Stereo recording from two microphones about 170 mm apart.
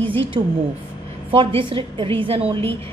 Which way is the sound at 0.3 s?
30° right (ahead or behind).